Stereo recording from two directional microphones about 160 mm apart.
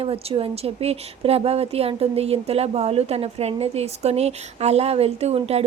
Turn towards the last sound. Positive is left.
turn(degrees=-40)  # may be behind; listen again after turning